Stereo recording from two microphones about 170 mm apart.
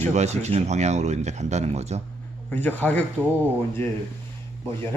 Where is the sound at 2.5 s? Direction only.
10° left (ahead or behind).